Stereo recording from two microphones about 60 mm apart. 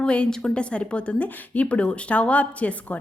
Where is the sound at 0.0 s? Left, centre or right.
Centre.